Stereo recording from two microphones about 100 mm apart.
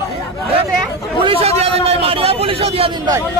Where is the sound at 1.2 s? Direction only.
65° right (ahead or behind); by 2.9 s 85° right.